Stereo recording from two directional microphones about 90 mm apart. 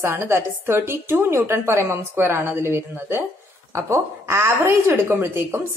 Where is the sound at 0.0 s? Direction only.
30° right (ahead or behind).